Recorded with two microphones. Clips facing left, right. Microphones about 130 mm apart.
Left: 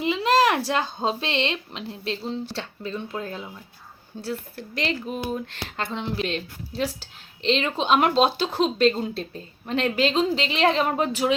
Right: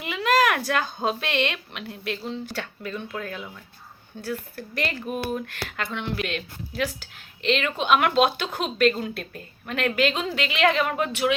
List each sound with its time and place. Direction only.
0.0 s speech: 30° left (ahead or behind)